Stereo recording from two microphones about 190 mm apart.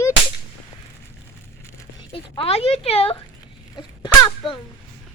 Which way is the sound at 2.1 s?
30° left (ahead or behind).